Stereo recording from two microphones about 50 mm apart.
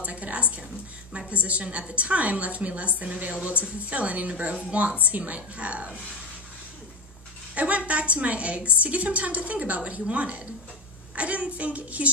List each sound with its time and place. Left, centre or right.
0.0 s a sound: right
1.3 s a woman's voice: right
7.5 s a woman's voice: right
11.1 s child singing: right